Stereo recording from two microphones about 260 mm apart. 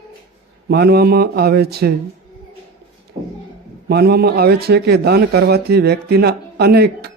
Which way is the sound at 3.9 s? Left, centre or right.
Right.